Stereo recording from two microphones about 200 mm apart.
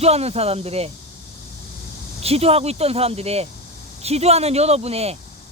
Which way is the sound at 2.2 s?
30° right (ahead or behind).